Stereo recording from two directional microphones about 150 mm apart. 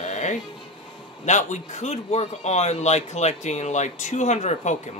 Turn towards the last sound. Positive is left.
turn(degrees=50)  # may be behind; listen again after turning